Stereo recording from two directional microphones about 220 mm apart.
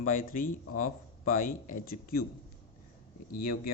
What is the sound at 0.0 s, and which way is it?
Speech, 40° left (ahead or behind).